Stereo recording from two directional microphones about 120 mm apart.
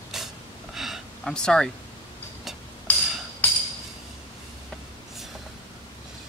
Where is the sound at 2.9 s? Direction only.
15° left (ahead or behind).